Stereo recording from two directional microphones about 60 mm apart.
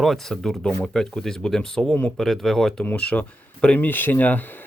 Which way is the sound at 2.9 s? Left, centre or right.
Left.